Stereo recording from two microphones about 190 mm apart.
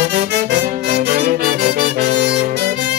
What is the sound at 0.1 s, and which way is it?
Music, 60° right (ahead or behind).